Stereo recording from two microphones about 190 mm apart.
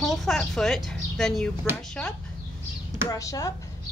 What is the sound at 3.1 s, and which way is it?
Speech, 15° left (ahead or behind).